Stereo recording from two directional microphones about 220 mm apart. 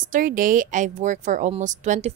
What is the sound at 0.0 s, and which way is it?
A woman's voice, 35° right (ahead or behind).